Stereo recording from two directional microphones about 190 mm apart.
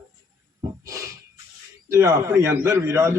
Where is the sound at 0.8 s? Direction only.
15° right (ahead or behind).